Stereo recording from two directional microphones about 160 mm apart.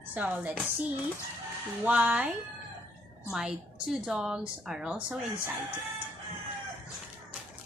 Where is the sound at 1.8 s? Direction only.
5° right (ahead or behind).